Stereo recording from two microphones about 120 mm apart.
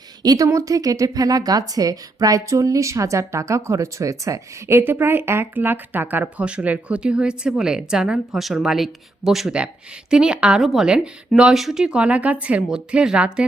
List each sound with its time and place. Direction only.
0.2 s speech: 30° right (ahead or behind); by 13.4 s 10° right (ahead or behind)